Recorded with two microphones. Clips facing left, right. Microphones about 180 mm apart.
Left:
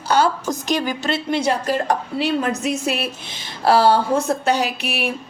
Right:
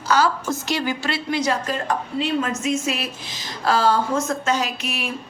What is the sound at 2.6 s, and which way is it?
A woman's voice, 65° left (ahead or behind).